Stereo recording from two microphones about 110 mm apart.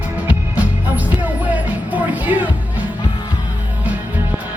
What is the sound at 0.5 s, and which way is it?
Music, 15° right (ahead or behind).